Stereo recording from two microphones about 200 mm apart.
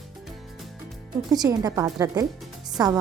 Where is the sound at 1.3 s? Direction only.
20° right (ahead or behind).